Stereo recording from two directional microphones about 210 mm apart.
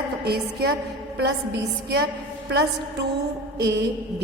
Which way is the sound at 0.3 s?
50° right (ahead or behind).